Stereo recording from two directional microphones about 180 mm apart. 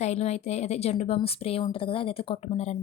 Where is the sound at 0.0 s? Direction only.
40° left (ahead or behind).